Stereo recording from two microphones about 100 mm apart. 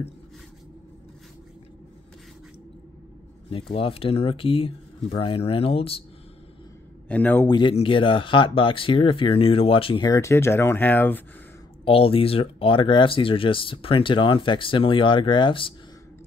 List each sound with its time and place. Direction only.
3.4 s speech: 70° left (ahead or behind)
7.1 s a man's voice: 15° left (ahead or behind)
7.4 s speech: 45° left (ahead or behind)
7.7 s speech: 60° left (ahead or behind)
10.0 s speech: 30° left (ahead or behind)
11.8 s speech: 65° left (ahead or behind)